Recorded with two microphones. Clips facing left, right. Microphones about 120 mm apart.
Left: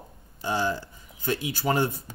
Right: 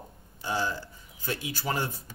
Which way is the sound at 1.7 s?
30° left (ahead or behind).